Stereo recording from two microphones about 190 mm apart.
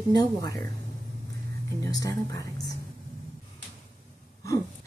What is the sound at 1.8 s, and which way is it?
Speech, 20° left (ahead or behind).